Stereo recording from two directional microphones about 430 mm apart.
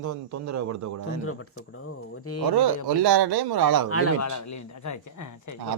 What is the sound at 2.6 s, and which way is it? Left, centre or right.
Speech, right.